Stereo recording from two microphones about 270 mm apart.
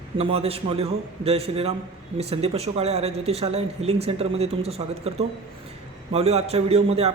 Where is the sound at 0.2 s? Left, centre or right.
Right.